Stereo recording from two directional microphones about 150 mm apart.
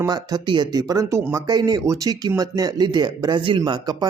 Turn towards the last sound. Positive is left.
turn(degrees=-25)  # may be behind; listen again after turning